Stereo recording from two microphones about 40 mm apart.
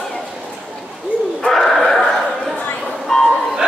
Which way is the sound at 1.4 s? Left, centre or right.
Centre.